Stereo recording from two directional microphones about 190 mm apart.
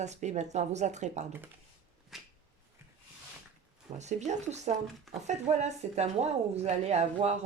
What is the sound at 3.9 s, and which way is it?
Speech, 35° right (ahead or behind).